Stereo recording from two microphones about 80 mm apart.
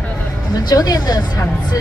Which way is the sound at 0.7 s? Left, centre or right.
Left.